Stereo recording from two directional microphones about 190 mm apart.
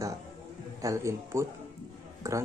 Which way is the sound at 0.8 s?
15° right (ahead or behind).